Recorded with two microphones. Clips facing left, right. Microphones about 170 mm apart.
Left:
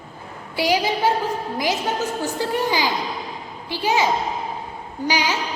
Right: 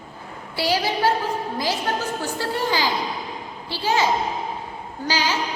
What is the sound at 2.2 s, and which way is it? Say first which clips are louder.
A woman's voice: left 2 dB; 15° left (ahead or behind).